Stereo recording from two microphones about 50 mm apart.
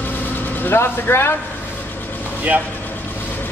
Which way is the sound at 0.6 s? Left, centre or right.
Left.